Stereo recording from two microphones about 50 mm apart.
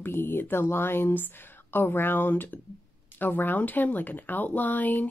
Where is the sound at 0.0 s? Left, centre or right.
Left.